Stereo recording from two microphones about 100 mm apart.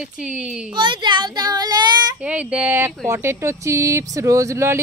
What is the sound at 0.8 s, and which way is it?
A child's voice, 50° right (ahead or behind).